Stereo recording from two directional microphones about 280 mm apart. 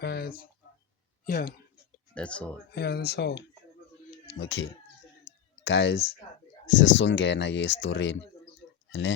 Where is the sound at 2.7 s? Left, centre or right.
Left.